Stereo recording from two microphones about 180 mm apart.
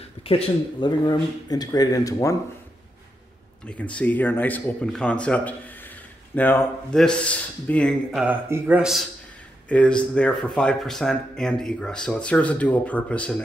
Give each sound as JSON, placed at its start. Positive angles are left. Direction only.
{"t": 0.2, "sound": "speech", "side_deg": 30}
{"t": 3.6, "sound": "speech", "side_deg": 5}
{"t": 8.2, "sound": "speech", "side_deg": -10}
{"t": 9.7, "sound": "speech", "side_deg": 5}